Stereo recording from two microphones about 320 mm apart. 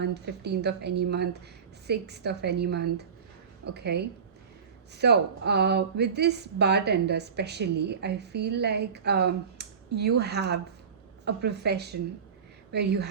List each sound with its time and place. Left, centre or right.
0.0 s speech: right